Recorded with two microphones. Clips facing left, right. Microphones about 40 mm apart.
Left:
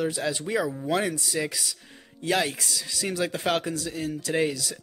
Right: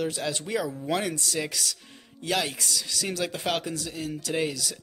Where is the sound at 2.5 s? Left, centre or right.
Left.